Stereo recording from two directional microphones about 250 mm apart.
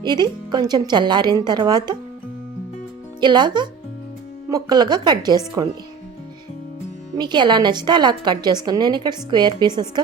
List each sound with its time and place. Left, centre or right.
0.0 s a woman's voice: centre
3.2 s a woman's voice: centre
7.2 s a woman's voice: centre